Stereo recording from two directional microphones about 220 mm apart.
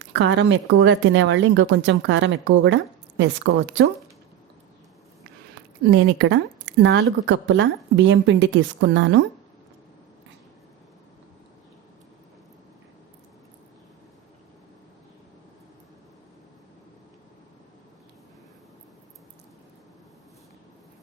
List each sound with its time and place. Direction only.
0.1 s speech: 55° right (ahead or behind)
5.8 s speech: 50° right (ahead or behind)